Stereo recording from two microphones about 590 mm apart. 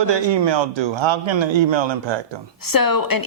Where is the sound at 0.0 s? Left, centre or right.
Right.